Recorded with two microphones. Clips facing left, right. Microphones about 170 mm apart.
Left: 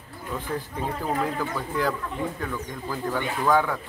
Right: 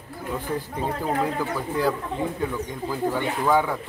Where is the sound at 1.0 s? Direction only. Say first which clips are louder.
Right 2 dB; 15° right (ahead or behind).